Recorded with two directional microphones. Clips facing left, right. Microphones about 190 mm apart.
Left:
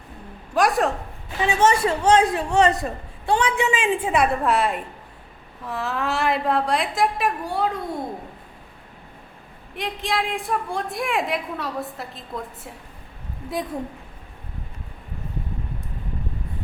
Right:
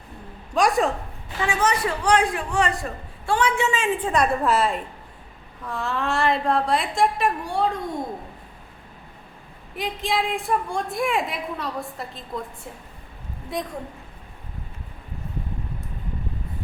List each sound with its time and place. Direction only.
0.5 s a woman's voice: centre (ahead or behind)
1.4 s a man's voice: 25° left (ahead or behind); by 7.7 s centre (ahead or behind)
9.7 s a woman's voice: centre (ahead or behind)